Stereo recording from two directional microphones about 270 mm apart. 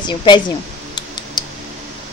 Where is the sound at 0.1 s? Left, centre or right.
Centre.